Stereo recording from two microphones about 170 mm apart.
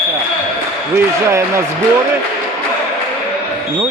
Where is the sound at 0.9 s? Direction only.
15° right (ahead or behind).